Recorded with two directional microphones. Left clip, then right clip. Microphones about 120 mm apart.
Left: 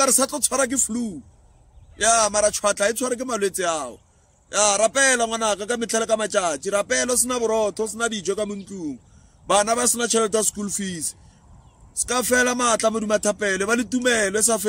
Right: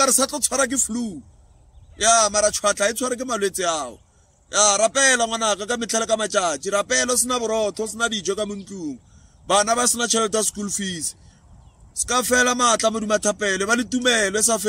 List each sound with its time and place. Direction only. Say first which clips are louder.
0.0 s a man's voice: right 1 dB; 25° left (ahead or behind)
12.1 s a man's voice: right 1 dB; 20° left (ahead or behind)